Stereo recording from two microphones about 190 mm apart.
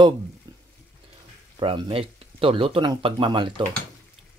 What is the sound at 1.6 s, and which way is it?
Speech, 30° right (ahead or behind).